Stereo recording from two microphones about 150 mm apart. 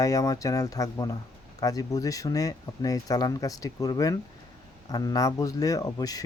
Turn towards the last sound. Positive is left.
turn(degrees=25)  # may be behind; listen again after turning